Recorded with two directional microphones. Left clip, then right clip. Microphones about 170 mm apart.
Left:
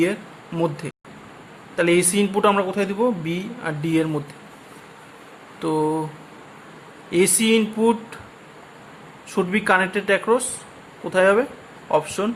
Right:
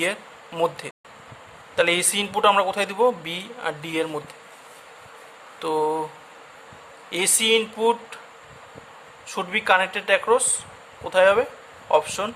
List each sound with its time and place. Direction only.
0.0 s a man's voice: 20° right (ahead or behind)
5.5 s a sound: 15° right (ahead or behind)
7.1 s a man's voice: 10° right (ahead or behind)
9.3 s a man's voice: 10° right (ahead or behind)